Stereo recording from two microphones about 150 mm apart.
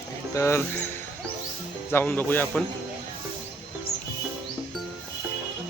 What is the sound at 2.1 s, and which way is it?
Speech, 15° left (ahead or behind).